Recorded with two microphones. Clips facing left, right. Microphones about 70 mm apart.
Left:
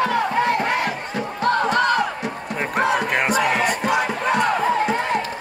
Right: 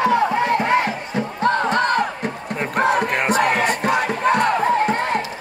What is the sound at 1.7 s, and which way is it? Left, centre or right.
Music, right.